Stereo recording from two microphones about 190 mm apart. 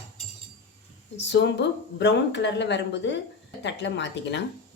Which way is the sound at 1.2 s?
65° left (ahead or behind).